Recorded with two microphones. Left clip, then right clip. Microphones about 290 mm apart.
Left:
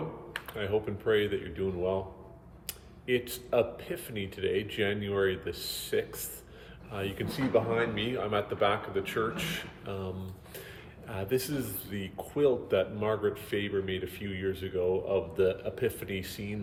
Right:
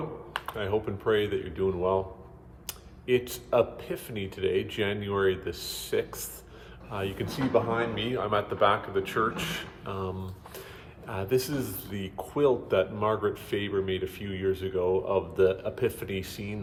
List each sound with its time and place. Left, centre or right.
0.3 s speech: centre